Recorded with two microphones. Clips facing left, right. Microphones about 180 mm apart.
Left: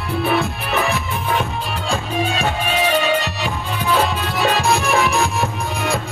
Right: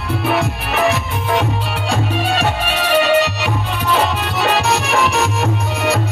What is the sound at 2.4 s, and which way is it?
Music, 70° right (ahead or behind).